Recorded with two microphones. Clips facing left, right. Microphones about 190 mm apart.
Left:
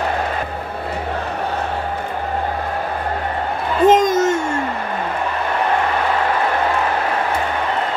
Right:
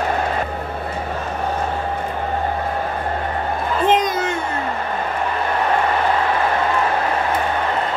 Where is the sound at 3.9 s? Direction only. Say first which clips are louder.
Left 6 dB; 45° left (ahead or behind).